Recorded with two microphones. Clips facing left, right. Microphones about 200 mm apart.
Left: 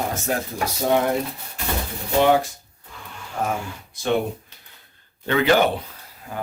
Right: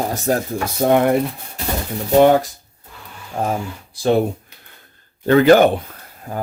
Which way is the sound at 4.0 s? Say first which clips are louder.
Right 8 dB; 35° right (ahead or behind).